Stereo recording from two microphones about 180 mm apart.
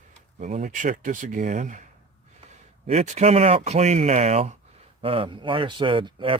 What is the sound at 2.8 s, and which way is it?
Speech, 40° right (ahead or behind).